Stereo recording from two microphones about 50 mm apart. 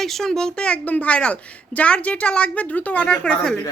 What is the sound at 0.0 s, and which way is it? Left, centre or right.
A woman's voice, centre.